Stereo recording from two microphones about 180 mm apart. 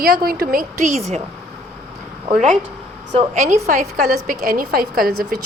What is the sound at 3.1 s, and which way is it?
A woman's voice, 45° right (ahead or behind).